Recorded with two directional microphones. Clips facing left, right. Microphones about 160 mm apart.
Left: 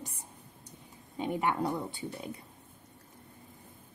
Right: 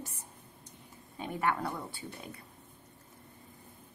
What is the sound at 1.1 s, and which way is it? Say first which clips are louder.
Speech: left 2 dB; 20° left (ahead or behind).